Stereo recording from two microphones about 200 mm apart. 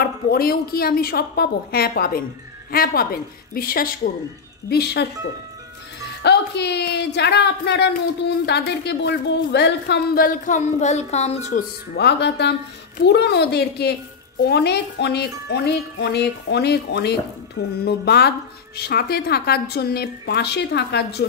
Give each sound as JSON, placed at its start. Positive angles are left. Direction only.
{"t": 0.0, "sound": "a woman's voice", "side_deg": 50}
{"t": 6.2, "sound": "speech", "side_deg": 60}
{"t": 11.9, "sound": "a woman's voice", "side_deg": 55}